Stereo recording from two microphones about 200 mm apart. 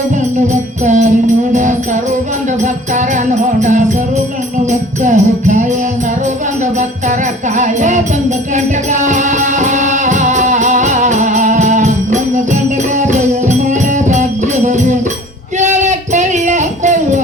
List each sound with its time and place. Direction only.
0.4 s music: 35° right (ahead or behind)
6.7 s music: 35° right (ahead or behind)
15.5 s a sound: 35° right (ahead or behind)